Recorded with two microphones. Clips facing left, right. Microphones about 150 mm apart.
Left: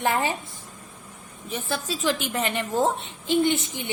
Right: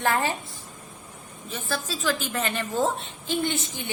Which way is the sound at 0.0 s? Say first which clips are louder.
Left 1 dB; 15° left (ahead or behind).